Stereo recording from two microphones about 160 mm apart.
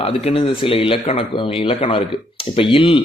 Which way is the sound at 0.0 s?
40° left (ahead or behind).